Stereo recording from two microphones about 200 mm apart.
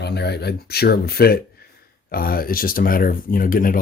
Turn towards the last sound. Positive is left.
turn(degrees=45)  # may be behind; listen again after turning